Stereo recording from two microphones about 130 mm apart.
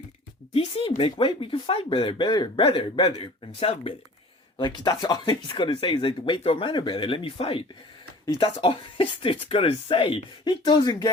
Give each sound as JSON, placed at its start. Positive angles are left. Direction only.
{"t": 0.5, "sound": "speech", "side_deg": 45}
{"t": 4.5, "sound": "speech", "side_deg": 35}
{"t": 8.6, "sound": "speech", "side_deg": 45}